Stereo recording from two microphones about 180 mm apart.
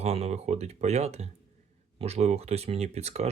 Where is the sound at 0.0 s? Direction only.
35° right (ahead or behind).